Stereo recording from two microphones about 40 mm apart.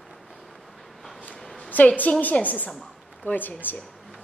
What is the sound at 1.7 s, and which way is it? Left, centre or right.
A woman's voice, left.